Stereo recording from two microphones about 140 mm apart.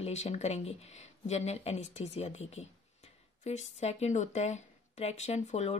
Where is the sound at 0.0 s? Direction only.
50° left (ahead or behind).